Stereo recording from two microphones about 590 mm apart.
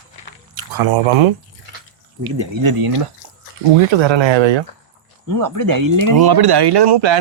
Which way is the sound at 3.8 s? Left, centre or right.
Right.